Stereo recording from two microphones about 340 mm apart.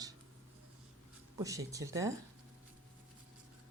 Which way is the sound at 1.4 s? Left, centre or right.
Centre.